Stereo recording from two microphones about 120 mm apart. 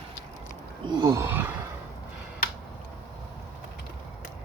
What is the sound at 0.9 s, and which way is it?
Roaring cats, 40° right (ahead or behind).